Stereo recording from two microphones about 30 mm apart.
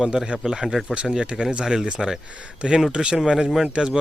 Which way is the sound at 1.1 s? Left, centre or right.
Right.